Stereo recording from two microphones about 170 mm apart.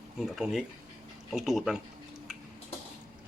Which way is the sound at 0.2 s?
Centre (ahead or behind).